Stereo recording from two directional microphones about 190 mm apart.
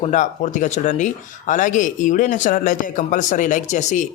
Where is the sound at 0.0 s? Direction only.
40° left (ahead or behind).